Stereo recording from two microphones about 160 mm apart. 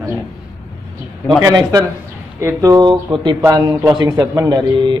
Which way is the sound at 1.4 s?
20° right (ahead or behind).